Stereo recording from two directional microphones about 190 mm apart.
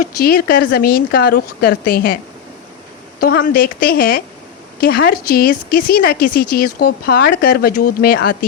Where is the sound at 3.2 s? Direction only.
50° left (ahead or behind).